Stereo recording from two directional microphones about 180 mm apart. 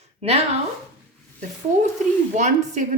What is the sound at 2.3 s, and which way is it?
Speech, 40° right (ahead or behind).